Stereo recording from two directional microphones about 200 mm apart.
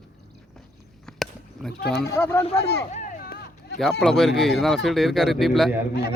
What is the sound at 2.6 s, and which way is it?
Speech, 55° left (ahead or behind).